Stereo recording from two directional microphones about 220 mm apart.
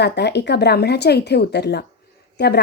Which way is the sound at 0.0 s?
50° left (ahead or behind).